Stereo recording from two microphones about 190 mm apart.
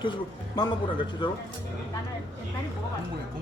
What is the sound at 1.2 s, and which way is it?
Speech, 25° left (ahead or behind).